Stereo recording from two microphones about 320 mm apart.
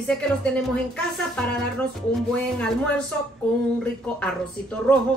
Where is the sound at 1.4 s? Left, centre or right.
Centre.